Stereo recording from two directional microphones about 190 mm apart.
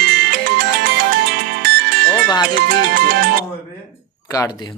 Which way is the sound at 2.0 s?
10° left (ahead or behind).